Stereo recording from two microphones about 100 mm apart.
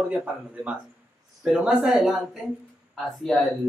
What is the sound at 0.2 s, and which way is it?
Speech, 15° right (ahead or behind).